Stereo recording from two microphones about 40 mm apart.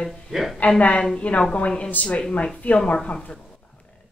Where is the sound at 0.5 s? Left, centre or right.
Left.